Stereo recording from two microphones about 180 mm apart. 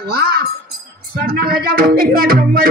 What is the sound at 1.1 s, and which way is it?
A man's voice, 55° right (ahead or behind).